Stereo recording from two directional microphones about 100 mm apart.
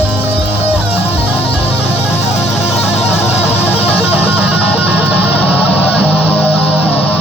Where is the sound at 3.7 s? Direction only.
20° left (ahead or behind).